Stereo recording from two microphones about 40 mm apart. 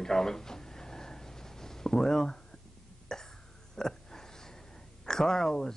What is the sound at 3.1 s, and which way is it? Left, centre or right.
Cough, centre.